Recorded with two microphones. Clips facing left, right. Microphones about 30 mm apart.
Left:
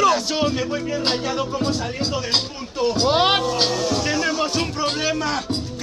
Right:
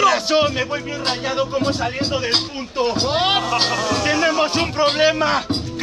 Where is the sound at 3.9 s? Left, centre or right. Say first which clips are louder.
Right 3 dB; centre.